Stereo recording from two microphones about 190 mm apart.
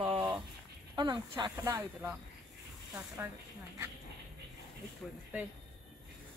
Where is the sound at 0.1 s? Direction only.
20° right (ahead or behind).